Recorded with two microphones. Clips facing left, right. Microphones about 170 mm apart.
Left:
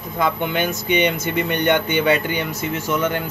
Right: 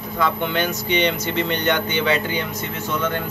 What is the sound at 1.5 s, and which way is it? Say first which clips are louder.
Speech: left 5 dB; 55° left (ahead or behind).